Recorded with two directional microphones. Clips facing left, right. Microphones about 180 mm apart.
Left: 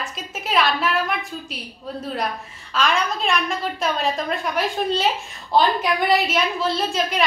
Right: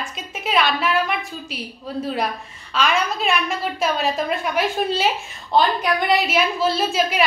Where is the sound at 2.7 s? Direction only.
5° right (ahead or behind).